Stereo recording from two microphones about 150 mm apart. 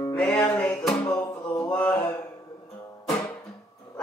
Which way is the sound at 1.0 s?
20° left (ahead or behind).